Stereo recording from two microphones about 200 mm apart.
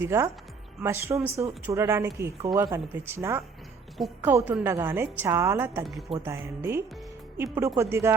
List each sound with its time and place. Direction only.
0.0 s speech: 15° right (ahead or behind)